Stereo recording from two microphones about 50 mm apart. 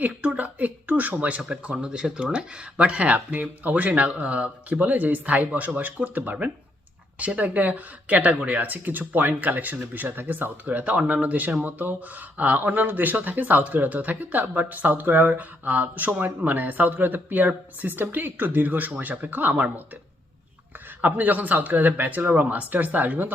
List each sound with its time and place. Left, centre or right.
0.0 s speech: right
1.4 s speech: right
21.0 s speech: right